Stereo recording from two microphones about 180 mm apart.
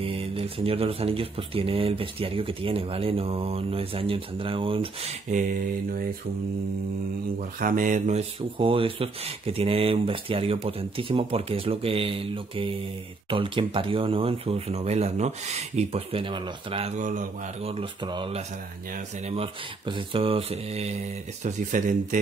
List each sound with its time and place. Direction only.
0.0 s speech: 30° right (ahead or behind)
7.6 s speech: 50° right (ahead or behind)
17.6 s speech: 30° right (ahead or behind)
21.5 s speech: 45° right (ahead or behind)